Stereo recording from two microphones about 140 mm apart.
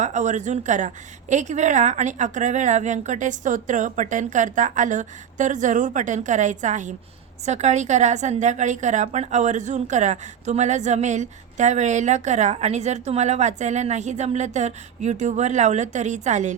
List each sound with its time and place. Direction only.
0.0 s a woman's voice: 60° right (ahead or behind)